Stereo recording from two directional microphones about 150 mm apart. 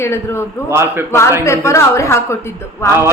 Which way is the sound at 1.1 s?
20° left (ahead or behind).